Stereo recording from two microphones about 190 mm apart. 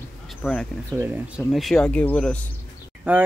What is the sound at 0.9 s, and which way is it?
Speech, 10° right (ahead or behind).